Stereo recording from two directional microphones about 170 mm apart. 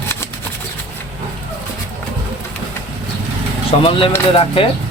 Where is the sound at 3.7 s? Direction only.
30° left (ahead or behind).